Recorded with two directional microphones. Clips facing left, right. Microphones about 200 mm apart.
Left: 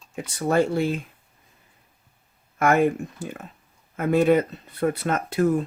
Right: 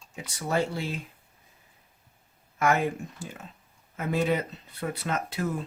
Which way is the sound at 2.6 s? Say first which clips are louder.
Left 6 dB; 55° left (ahead or behind).